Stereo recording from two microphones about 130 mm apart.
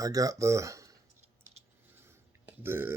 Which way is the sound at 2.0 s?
15° right (ahead or behind).